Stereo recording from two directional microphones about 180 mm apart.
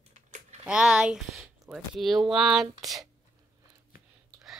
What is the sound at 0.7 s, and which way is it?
Speech, 5° right (ahead or behind).